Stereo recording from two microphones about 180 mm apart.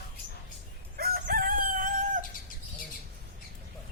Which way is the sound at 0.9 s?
55° right (ahead or behind).